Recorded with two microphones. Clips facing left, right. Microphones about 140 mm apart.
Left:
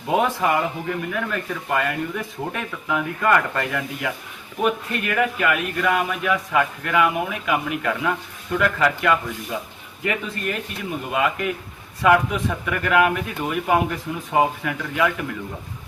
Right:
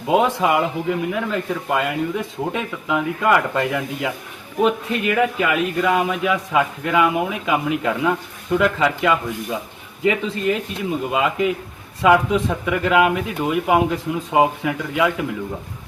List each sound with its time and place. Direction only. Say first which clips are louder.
0.1 s a man's voice: right 3 dB; 20° right (ahead or behind)